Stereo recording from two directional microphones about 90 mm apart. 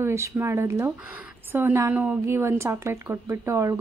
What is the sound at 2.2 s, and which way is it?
Speech, 30° right (ahead or behind).